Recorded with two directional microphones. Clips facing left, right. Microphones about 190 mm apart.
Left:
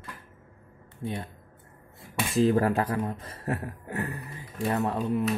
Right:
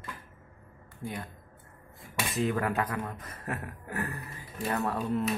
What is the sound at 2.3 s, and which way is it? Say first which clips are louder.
Speech: left 7 dB; 35° left (ahead or behind).